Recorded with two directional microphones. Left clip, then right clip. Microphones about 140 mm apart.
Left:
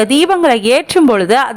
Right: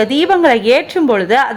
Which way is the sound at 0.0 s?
30° left (ahead or behind).